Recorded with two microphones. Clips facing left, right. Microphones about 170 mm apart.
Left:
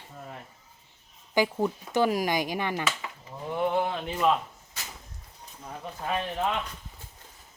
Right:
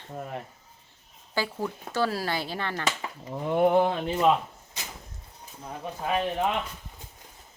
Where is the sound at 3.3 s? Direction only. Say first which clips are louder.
Right 6 dB; 55° right (ahead or behind).